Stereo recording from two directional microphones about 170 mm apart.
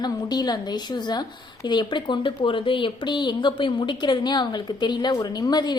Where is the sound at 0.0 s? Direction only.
25° left (ahead or behind).